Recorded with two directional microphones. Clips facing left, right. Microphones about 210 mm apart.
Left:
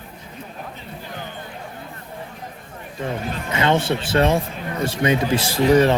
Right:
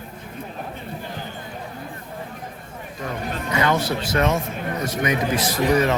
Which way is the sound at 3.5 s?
25° left (ahead or behind).